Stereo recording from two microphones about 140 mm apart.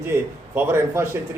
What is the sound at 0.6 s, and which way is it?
Speech, 15° right (ahead or behind).